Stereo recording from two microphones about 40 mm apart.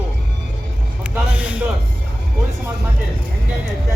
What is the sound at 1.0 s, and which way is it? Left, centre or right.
Speech, right.